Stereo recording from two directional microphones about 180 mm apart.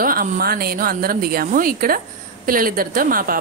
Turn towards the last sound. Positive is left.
turn(degrees=-50)  # may be behind; listen again after turning